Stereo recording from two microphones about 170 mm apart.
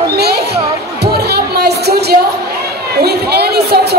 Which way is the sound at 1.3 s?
70° right (ahead or behind).